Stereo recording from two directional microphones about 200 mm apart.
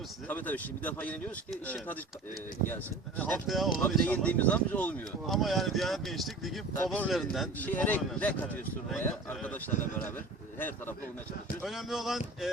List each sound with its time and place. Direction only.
0.3 s speech: 10° left (ahead or behind)
3.2 s speech: 10° left (ahead or behind)
11.6 s speech: centre (ahead or behind)